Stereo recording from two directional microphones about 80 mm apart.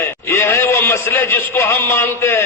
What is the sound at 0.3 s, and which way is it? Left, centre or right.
A man's voice, left.